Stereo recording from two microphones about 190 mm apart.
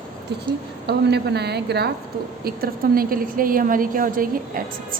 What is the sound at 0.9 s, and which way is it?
A woman's voice, 60° right (ahead or behind).